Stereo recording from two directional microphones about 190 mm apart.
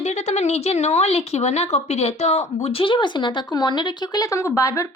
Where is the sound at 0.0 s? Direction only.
35° left (ahead or behind).